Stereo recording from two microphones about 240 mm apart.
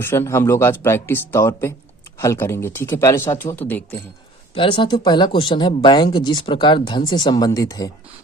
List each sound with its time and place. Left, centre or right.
0.0 s speech: centre
4.5 s speech: left